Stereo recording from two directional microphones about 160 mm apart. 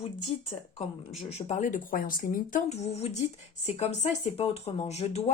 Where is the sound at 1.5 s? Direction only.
50° left (ahead or behind).